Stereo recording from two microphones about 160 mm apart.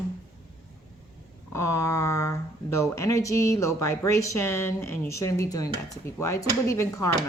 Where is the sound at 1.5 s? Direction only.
15° left (ahead or behind).